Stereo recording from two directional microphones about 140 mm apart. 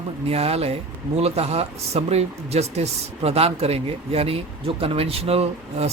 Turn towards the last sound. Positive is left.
turn(degrees=-45)  # may be behind; listen again after turning